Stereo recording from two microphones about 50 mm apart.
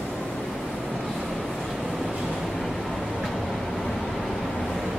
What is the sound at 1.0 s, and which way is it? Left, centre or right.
Train, centre.